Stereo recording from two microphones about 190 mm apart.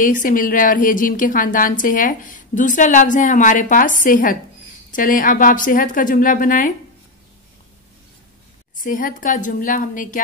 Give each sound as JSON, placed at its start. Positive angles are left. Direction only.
{"t": 0.0, "sound": "a woman's voice", "side_deg": 45}
{"t": 8.7, "sound": "a woman's voice", "side_deg": 45}